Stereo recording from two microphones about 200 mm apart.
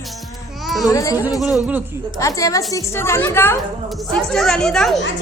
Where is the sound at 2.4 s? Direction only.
15° left (ahead or behind).